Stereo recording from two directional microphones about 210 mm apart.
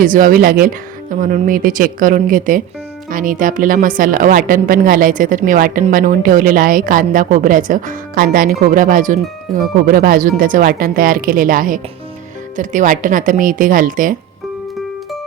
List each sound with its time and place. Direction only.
0.0 s a woman's voice: 40° right (ahead or behind)